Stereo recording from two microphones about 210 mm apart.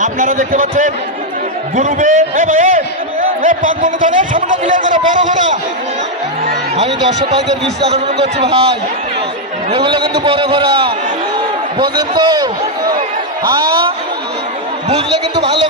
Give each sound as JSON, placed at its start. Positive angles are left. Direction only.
{"t": 0.0, "sound": "a man's voice", "side_deg": -40}
{"t": 7.9, "sound": "a man's voice", "side_deg": -30}
{"t": 9.7, "sound": "a man's voice", "side_deg": -25}
{"t": 11.3, "sound": "a sound", "side_deg": -20}
{"t": 13.5, "sound": "a man's voice", "side_deg": -20}